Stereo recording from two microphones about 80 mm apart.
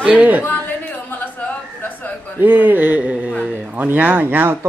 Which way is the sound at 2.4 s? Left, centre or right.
Centre.